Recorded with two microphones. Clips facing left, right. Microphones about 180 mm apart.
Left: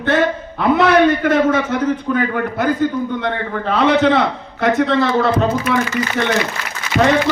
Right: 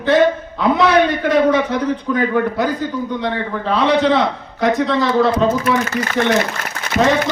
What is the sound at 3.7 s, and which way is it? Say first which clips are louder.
A man's voice: left 1 dB; 60° left (ahead or behind).